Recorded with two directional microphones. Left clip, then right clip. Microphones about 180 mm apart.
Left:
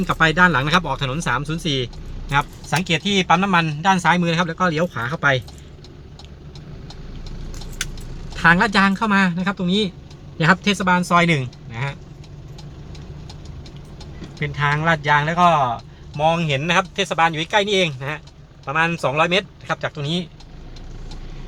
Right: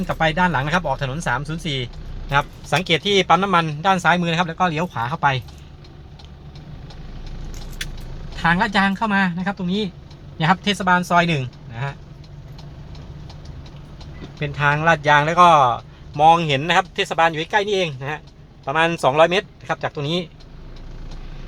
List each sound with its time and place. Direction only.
0.1 s speech: centre (ahead or behind); by 5.3 s 20° right (ahead or behind)
8.4 s speech: 10° right (ahead or behind)
14.3 s speech: 20° right (ahead or behind); by 18.2 s 5° right (ahead or behind)
18.6 s speech: 20° right (ahead or behind)